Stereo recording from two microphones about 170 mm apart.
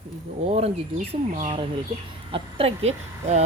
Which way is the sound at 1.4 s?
35° right (ahead or behind).